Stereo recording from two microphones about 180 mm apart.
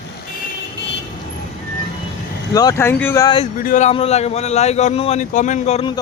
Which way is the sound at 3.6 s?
45° left (ahead or behind).